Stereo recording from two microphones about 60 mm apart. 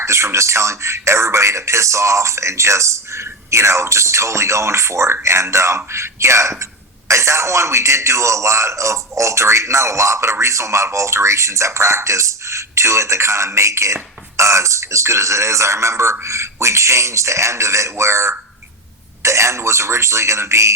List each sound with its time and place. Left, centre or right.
0.0 s a man's voice: right